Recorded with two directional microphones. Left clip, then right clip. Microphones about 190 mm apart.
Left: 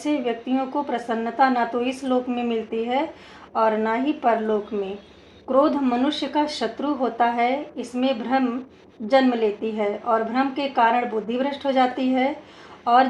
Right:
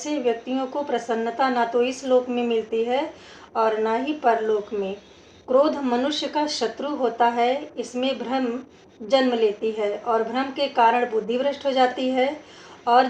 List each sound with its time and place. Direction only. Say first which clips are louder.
0.0 s a woman's voice: even; 30° left (ahead or behind)